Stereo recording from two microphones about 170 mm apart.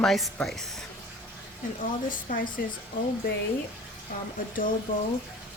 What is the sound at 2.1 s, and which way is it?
Speech, 50° left (ahead or behind).